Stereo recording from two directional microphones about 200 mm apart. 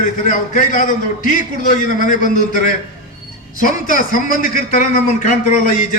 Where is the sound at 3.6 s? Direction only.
40° left (ahead or behind).